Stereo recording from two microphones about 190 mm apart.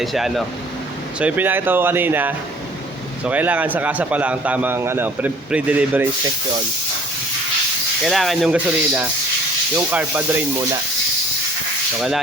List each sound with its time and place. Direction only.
0.0 s a man's voice: centre (ahead or behind)
8.0 s a man's voice: centre (ahead or behind)
11.9 s speech: centre (ahead or behind)